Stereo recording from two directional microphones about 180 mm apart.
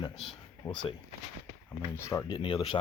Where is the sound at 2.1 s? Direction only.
20° left (ahead or behind).